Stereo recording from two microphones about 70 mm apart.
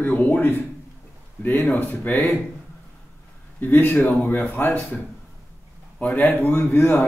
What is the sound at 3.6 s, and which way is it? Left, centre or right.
A man's voice, left.